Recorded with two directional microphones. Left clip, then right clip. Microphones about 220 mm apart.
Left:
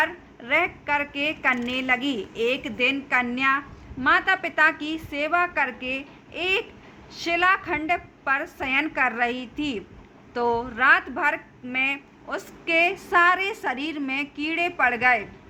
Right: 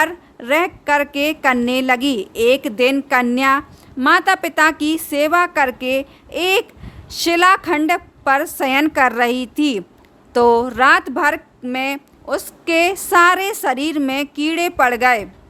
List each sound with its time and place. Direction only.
0.0 s a woman's voice: 55° right (ahead or behind)